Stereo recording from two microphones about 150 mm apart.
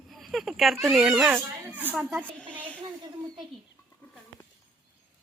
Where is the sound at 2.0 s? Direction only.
5° left (ahead or behind).